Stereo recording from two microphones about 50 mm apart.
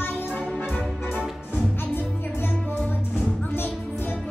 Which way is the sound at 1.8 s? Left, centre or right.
Left.